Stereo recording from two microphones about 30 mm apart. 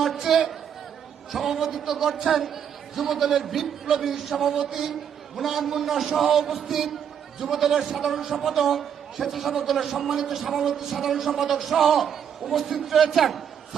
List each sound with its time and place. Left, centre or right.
0.2 s a man's voice: centre